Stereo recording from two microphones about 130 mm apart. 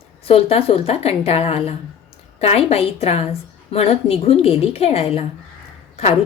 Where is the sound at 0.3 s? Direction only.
50° left (ahead or behind).